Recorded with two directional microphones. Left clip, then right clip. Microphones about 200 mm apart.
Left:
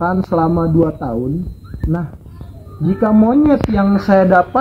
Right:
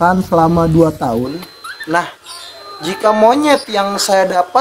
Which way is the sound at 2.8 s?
30° right (ahead or behind).